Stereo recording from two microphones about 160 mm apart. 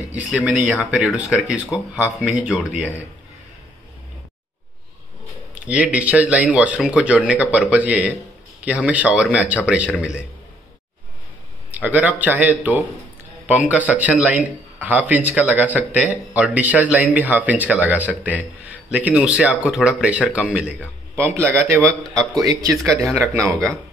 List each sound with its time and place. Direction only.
0.1 s speech: 10° right (ahead or behind)
5.5 s speech: 10° right (ahead or behind)
11.7 s speech: 10° right (ahead or behind)
21.5 s speech: 15° right (ahead or behind)
22.0 s speech: centre (ahead or behind)
22.4 s speech: 20° right (ahead or behind)
22.8 s speech: 5° left (ahead or behind)